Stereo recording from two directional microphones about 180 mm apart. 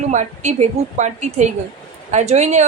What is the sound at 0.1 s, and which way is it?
A woman's voice, 40° right (ahead or behind).